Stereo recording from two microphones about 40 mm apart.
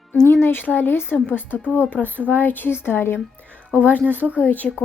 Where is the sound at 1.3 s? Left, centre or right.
Left.